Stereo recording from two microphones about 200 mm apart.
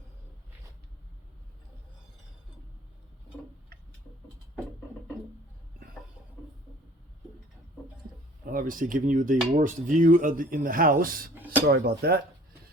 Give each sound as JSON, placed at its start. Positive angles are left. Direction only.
{"t": 8.4, "sound": "speech", "side_deg": -45}